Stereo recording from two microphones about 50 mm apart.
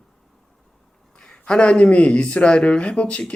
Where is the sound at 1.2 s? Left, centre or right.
Centre.